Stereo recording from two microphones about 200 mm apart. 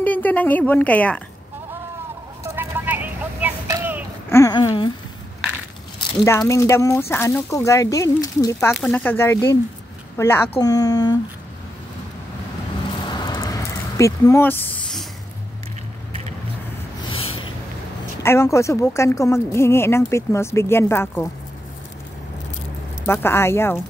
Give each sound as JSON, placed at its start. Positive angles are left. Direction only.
{"t": 0.0, "sound": "a woman's voice", "side_deg": 10}
{"t": 2.4, "sound": "a sound", "side_deg": -10}
{"t": 4.3, "sound": "speech", "side_deg": 15}
{"t": 6.2, "sound": "a woman's voice", "side_deg": 15}
{"t": 8.5, "sound": "a woman's voice", "side_deg": 0}
{"t": 13.0, "sound": "a sound", "side_deg": 20}
{"t": 17.1, "sound": "a sound", "side_deg": 30}
{"t": 18.2, "sound": "a woman's voice", "side_deg": 15}
{"t": 23.0, "sound": "a woman's voice", "side_deg": 10}